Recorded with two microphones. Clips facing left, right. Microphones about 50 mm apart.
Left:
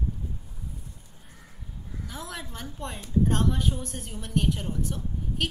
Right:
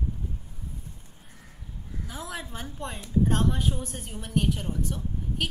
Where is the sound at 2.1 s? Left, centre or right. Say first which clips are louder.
Right 2 dB; centre.